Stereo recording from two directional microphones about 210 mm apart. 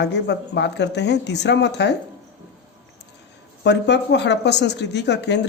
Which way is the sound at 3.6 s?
55° left (ahead or behind).